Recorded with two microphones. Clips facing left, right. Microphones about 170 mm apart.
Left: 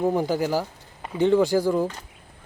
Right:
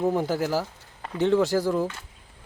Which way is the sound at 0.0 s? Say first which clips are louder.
Left 2 dB; centre (ahead or behind).